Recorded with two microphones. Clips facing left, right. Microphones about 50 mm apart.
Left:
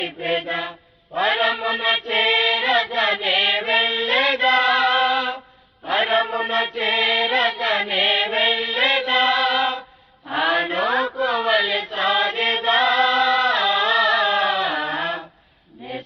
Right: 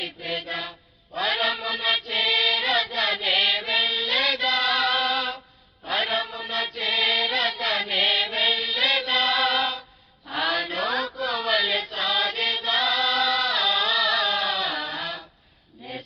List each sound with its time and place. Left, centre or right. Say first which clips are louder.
0.0 s mantra: left 8 dB; left
5.8 s music: left 6 dB; left
9.4 s music: left 3 dB; centre
10.2 s chant: left 6 dB; left
11.9 s music: left 8 dB; left
12.5 s singing: left 6 dB; left